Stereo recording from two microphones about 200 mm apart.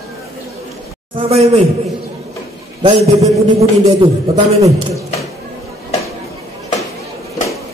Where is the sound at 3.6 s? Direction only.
30° right (ahead or behind).